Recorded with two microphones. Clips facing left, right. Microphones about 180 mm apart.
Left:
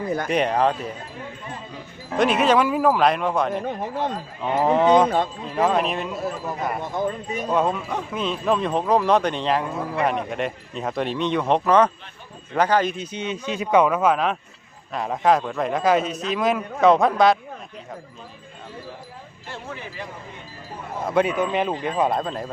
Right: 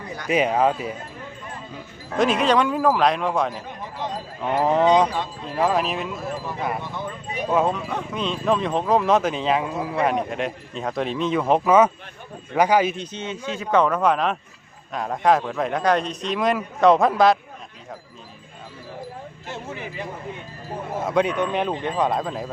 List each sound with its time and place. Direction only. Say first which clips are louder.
0.3 s speech: right 3 dB; 5° right (ahead or behind)
2.1 s speech: left 1 dB; centre (ahead or behind)
3.6 s speech: left 6 dB; 55° left (ahead or behind)
4.4 s speech: even; centre (ahead or behind)
7.0 s speech: left 7 dB; 45° left (ahead or behind)
7.5 s speech: right 1 dB; centre (ahead or behind)
13.0 s speech: left 2 dB; 10° left (ahead or behind)
21.0 s speech: left 1 dB; centre (ahead or behind)